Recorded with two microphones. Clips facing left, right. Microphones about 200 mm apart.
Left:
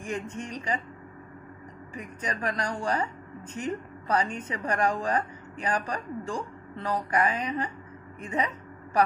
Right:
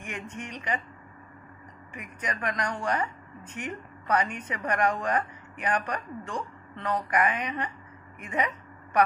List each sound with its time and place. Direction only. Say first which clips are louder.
0.0 s speech: left 4 dB; 35° left (ahead or behind)
2.0 s a woman's voice: left 1 dB; 30° left (ahead or behind)